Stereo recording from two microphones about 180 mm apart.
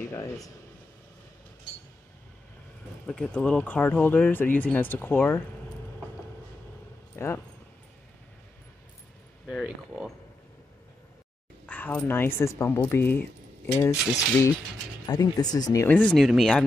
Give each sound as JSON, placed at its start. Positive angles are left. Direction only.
{"t": 0.1, "sound": "speech", "side_deg": 15}
{"t": 3.1, "sound": "speech", "side_deg": 5}
{"t": 7.2, "sound": "speech", "side_deg": 15}
{"t": 9.5, "sound": "speech", "side_deg": 0}
{"t": 11.6, "sound": "speech", "side_deg": 10}
{"t": 15.0, "sound": "speech", "side_deg": 20}